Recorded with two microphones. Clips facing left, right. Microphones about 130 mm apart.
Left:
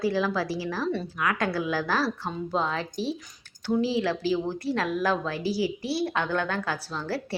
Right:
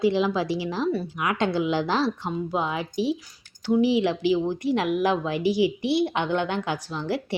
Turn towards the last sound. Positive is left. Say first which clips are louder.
# right 3 dB
turn(degrees=-15)  # may be behind; listen again after turning